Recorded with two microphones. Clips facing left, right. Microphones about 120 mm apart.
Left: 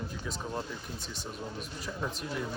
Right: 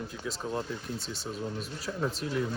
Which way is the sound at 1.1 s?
35° right (ahead or behind).